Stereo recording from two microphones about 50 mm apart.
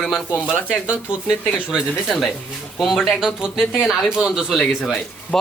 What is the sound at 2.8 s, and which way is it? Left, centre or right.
Speech, centre.